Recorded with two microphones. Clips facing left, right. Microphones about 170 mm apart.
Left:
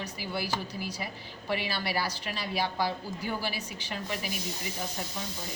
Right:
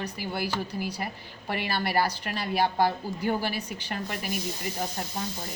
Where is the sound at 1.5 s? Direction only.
55° right (ahead or behind).